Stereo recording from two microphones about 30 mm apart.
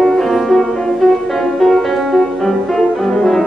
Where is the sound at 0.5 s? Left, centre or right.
Left.